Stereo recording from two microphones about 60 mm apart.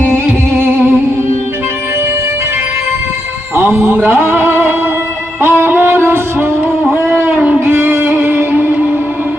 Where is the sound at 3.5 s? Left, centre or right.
Right.